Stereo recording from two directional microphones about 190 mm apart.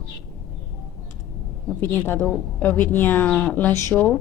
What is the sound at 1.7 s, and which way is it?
A woman's voice, 10° left (ahead or behind).